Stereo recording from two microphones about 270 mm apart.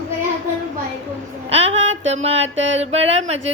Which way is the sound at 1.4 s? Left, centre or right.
Right.